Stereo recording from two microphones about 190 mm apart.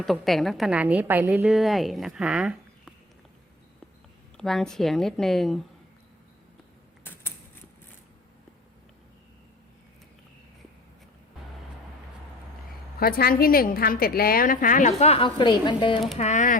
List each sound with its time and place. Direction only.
0.0 s a woman's voice: centre (ahead or behind)
4.4 s a woman's voice: centre (ahead or behind)
7.0 s a sound: 10° left (ahead or behind)
13.0 s a woman's voice: 50° left (ahead or behind); by 16.0 s 25° left (ahead or behind)
16.1 s speech: 35° left (ahead or behind)